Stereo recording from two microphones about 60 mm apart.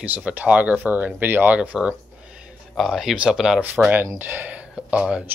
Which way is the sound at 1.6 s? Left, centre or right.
Right.